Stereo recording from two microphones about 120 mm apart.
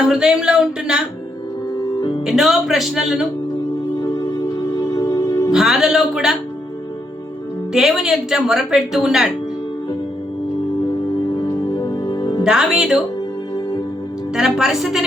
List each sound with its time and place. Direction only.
0.1 s speech: 5° right (ahead or behind)
2.2 s speech: centre (ahead or behind)
4.0 s music: 30° left (ahead or behind)
5.5 s speech: 5° right (ahead or behind)
7.7 s speech: 5° right (ahead or behind)
11.3 s music: 35° left (ahead or behind)
12.5 s speech: 5° right (ahead or behind)
14.3 s speech: 5° right (ahead or behind)